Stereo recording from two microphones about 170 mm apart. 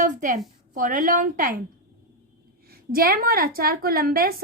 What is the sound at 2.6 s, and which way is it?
A woman's voice, 60° right (ahead or behind).